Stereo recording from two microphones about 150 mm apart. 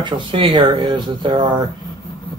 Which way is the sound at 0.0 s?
35° right (ahead or behind).